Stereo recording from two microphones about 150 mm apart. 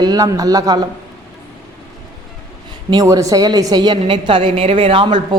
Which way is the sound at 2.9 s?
25° right (ahead or behind).